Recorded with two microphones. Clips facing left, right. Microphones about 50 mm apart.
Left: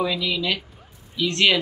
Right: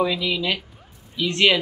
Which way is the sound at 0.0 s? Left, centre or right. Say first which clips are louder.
Right 2 dB; centre.